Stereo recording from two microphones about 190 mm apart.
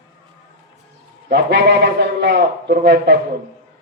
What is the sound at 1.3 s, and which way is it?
Speech, 60° right (ahead or behind).